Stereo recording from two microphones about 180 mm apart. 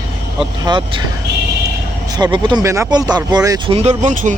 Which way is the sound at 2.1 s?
25° right (ahead or behind).